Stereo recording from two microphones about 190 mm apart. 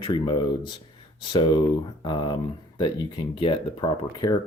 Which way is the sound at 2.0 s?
25° left (ahead or behind).